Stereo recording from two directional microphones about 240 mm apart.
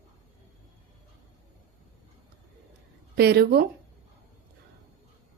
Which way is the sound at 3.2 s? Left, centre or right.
Right.